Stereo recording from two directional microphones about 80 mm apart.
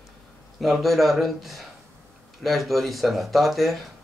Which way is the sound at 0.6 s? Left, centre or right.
Centre.